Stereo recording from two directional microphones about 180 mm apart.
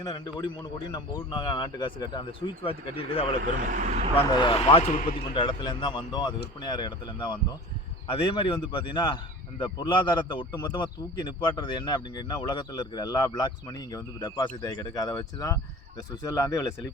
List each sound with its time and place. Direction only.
0.0 s a man's voice: 20° left (ahead or behind)
3.4 s speech: 45° right (ahead or behind)
4.3 s a man's voice: 25° left (ahead or behind)